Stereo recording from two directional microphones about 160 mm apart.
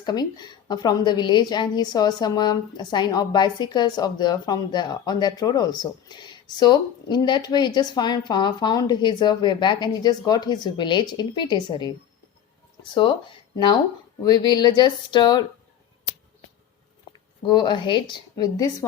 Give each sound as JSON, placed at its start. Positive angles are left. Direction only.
{"t": 0.0, "sound": "a woman's voice", "side_deg": 25}
{"t": 12.9, "sound": "speech", "side_deg": 30}
{"t": 14.3, "sound": "a woman's voice", "side_deg": 25}
{"t": 17.1, "sound": "a woman's voice", "side_deg": 30}